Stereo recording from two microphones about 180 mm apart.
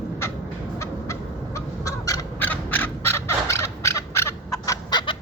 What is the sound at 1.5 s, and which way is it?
Crow, 15° left (ahead or behind).